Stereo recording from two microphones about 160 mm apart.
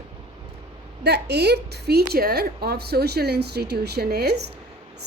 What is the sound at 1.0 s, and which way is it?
A woman's voice, 90° right.